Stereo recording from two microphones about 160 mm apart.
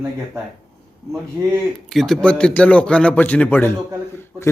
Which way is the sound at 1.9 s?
Centre (ahead or behind).